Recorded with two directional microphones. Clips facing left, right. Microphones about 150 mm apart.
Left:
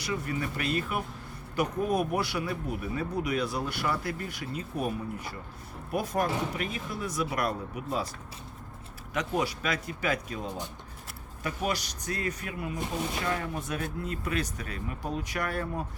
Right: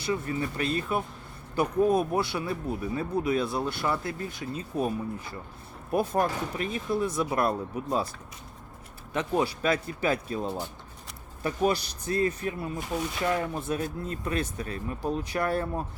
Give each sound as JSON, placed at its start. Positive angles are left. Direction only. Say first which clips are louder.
{"t": 0.0, "sound": "speech", "louder": "right 3 dB", "side_deg": -30}
{"t": 9.1, "sound": "speech", "louder": "right 3 dB", "side_deg": -30}
{"t": 11.4, "sound": "speech", "louder": "right 5 dB", "side_deg": -30}